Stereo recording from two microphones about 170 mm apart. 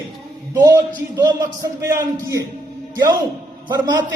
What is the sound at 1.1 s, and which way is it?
A man's voice, 20° right (ahead or behind).